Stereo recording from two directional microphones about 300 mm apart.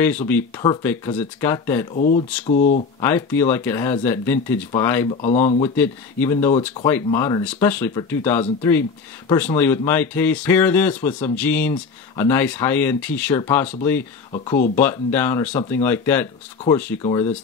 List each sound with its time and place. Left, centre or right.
0.3 s speech: centre
2.0 s speech: left
3.0 s speech: centre
5.1 s speech: left
5.6 s speech: centre
14.3 s speech: centre
14.8 s speech: centre